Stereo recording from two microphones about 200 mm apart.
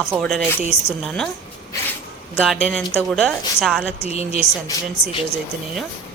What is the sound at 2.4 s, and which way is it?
A woman's voice, centre (ahead or behind).